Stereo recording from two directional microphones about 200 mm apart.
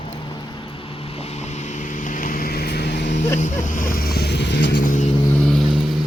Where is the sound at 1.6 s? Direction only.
35° left (ahead or behind); by 3.2 s 60° left (ahead or behind).